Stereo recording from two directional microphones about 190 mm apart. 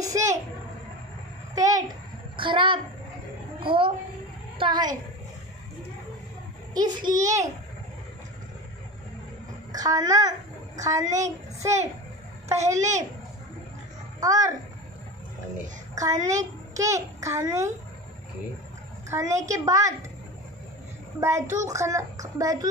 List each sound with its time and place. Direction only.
0.0 s a sound: 15° right (ahead or behind)
1.5 s a child's voice: 20° right (ahead or behind)
6.7 s a child's voice: 20° right (ahead or behind)
9.7 s a child's voice: 20° right (ahead or behind)
11.2 s a child's voice: 35° right (ahead or behind)
12.4 s a child's voice: 15° right (ahead or behind)
14.2 s speech: 15° right (ahead or behind)
15.9 s a child's voice: 20° right (ahead or behind)
19.0 s speech: 15° right (ahead or behind)
21.2 s speech: 15° right (ahead or behind)